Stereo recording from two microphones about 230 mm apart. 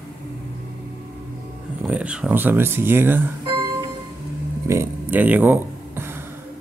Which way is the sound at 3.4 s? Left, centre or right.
Right.